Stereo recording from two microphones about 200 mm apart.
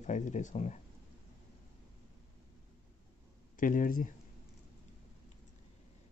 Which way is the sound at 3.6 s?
40° left (ahead or behind).